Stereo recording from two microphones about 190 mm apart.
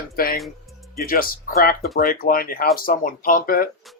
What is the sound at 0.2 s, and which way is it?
Music, 50° left (ahead or behind).